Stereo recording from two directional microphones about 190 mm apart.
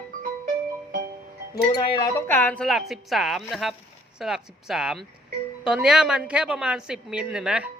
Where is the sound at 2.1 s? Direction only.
10° left (ahead or behind).